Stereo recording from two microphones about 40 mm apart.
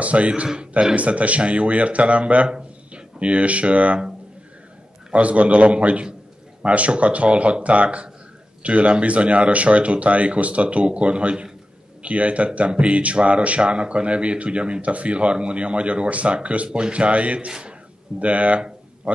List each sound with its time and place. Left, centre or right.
0.0 s a man's voice: right
0.6 s a man's voice: right
5.1 s a man's voice: right
17.5 s a man's voice: centre
18.2 s a man's voice: right